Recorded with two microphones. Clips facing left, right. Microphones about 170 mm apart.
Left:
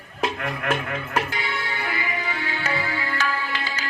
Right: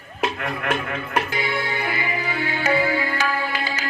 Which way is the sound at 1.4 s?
15° right (ahead or behind).